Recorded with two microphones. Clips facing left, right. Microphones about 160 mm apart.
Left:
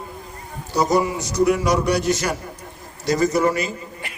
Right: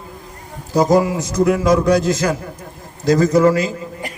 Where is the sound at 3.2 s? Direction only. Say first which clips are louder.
Right 4 dB; 90° right.